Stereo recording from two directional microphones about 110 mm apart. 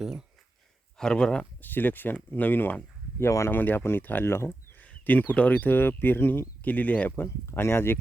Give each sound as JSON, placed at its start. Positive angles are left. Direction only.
{"t": 0.0, "sound": "speech", "side_deg": -5}
{"t": 0.9, "sound": "speech", "side_deg": 5}
{"t": 4.9, "sound": "a sound", "side_deg": 15}
{"t": 5.3, "sound": "speech", "side_deg": 15}